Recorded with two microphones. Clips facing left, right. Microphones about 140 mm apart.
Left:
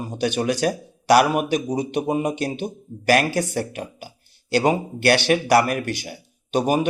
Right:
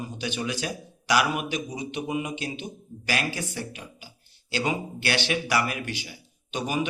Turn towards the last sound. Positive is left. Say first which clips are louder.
# left 8 dB
turn(degrees=50)  # may be behind; listen again after turning